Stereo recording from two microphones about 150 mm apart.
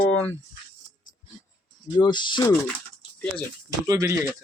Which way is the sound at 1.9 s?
30° left (ahead or behind).